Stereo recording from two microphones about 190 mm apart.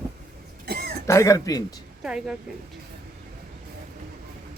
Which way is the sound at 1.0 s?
15° left (ahead or behind).